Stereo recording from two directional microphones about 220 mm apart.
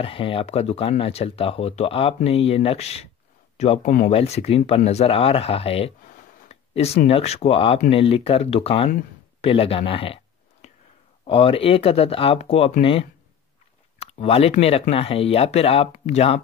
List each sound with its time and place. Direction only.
0.0 s speech: 25° left (ahead or behind)
9.4 s a sound: 25° left (ahead or behind)
11.2 s speech: 25° left (ahead or behind)
13.9 s speech: 30° left (ahead or behind)